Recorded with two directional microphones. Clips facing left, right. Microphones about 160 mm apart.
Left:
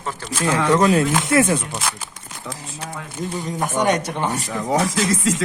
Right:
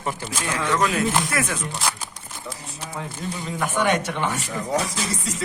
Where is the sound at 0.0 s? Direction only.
15° right (ahead or behind).